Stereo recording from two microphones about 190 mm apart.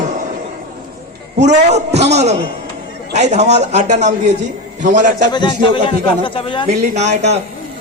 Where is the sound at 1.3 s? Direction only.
35° right (ahead or behind).